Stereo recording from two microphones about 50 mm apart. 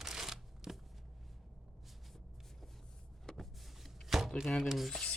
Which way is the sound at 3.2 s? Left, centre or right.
Centre.